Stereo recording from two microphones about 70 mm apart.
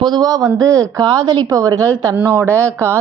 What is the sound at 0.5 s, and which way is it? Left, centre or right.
A woman's voice, right.